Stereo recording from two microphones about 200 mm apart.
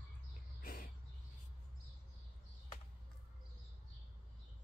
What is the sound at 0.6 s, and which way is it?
Bird, 45° left (ahead or behind).